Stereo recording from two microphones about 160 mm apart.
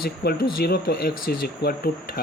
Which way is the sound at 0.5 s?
80° left.